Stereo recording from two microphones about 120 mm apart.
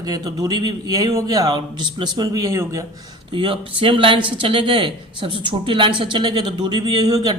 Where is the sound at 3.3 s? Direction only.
45° right (ahead or behind).